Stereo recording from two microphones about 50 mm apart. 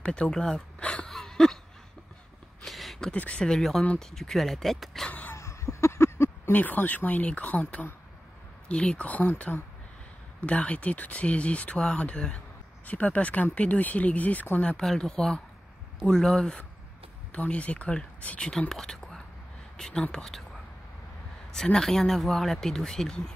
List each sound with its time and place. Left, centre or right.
0.0 s speech: centre
1.1 s a sound: centre
2.6 s a sound: centre
3.1 s speech: left; by 5.0 s centre
5.3 s a sound: left
6.5 s speech: left
10.4 s speech: left
14.8 s speech: centre
17.3 s speech: left
18.5 s speech: centre
21.7 s speech: centre